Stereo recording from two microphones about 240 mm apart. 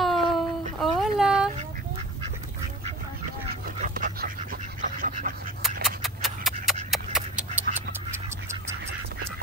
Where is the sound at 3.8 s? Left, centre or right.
Right.